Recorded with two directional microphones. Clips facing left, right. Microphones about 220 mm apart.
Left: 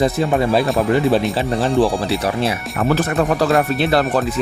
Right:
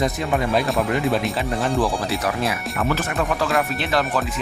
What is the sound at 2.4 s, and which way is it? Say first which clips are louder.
Speech: left 4 dB; 35° left (ahead or behind).